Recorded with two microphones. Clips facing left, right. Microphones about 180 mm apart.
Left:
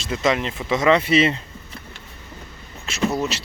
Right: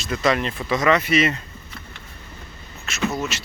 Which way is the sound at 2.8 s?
35° left (ahead or behind).